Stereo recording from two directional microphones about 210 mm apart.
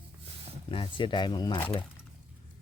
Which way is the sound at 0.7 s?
25° left (ahead or behind).